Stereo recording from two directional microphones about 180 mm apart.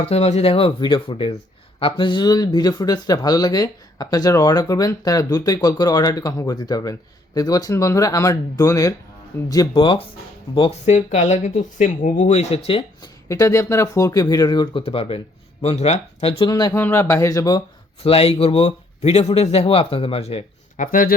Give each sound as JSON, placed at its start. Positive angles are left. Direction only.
{"t": 0.0, "sound": "speech", "side_deg": 35}
{"t": 13.2, "sound": "speech", "side_deg": 15}
{"t": 16.5, "sound": "speech", "side_deg": 20}
{"t": 18.0, "sound": "speech", "side_deg": 35}
{"t": 20.8, "sound": "speech", "side_deg": 50}